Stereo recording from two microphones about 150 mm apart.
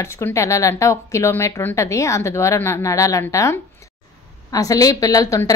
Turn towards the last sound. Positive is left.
turn(degrees=25)  # may be behind; listen again after turning